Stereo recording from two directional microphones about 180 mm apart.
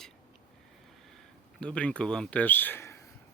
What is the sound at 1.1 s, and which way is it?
Speech, 5° left (ahead or behind).